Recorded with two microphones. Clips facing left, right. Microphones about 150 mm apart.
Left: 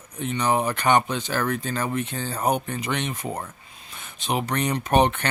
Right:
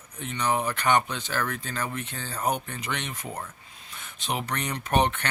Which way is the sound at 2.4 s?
35° left (ahead or behind).